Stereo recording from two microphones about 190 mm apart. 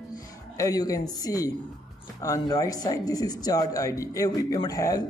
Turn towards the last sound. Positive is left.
turn(degrees=20)  # may be behind; listen again after turning